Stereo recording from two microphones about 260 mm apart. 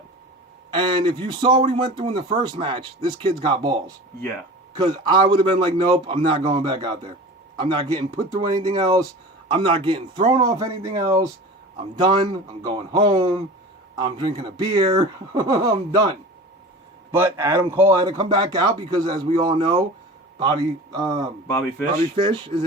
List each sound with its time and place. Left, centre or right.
0.7 s speech: centre